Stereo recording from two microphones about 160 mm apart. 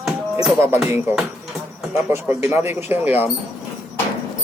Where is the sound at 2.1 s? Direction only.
15° right (ahead or behind).